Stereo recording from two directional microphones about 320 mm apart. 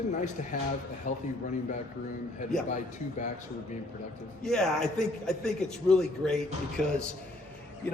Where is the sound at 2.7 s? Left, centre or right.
Left.